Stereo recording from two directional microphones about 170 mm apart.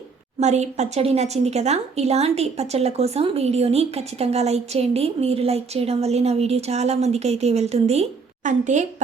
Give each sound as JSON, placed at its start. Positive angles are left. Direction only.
{"t": 0.3, "sound": "a woman's voice", "side_deg": -40}